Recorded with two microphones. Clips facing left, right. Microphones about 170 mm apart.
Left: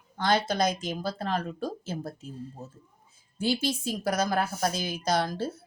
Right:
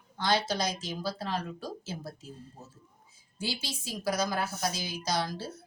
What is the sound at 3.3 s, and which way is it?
A woman's voice, 55° left (ahead or behind).